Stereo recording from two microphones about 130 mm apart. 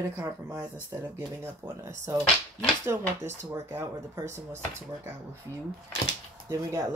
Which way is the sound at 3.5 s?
20° right (ahead or behind).